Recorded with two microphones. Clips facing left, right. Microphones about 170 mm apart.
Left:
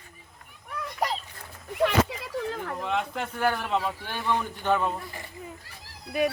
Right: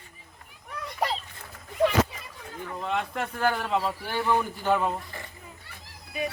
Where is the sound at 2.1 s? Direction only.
75° left (ahead or behind).